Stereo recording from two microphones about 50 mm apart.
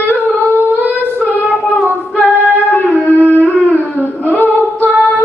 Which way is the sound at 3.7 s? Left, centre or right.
Left.